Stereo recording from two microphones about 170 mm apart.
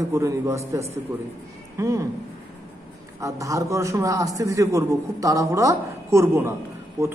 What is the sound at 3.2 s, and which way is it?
A man's voice, 20° right (ahead or behind).